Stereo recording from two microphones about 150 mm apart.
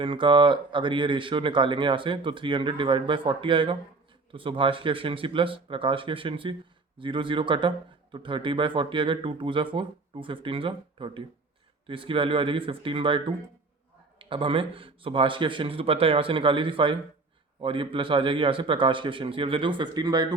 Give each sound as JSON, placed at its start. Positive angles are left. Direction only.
{"t": 0.0, "sound": "speech", "side_deg": -35}